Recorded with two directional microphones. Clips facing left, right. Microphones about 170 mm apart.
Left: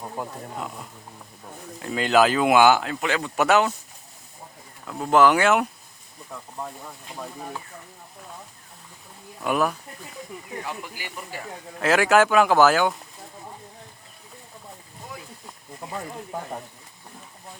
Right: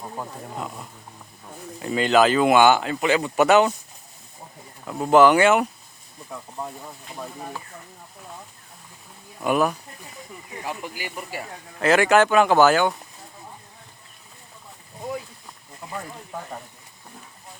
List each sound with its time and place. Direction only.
0.0 s speech: centre (ahead or behind)
4.9 s speech: 5° right (ahead or behind)
7.2 s speech: 5° right (ahead or behind)
9.4 s speech: 5° right (ahead or behind)
10.7 s speech: 20° right (ahead or behind)
11.8 s speech: centre (ahead or behind)